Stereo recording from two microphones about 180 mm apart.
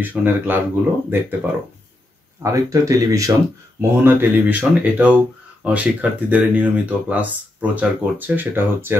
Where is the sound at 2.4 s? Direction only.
20° right (ahead or behind).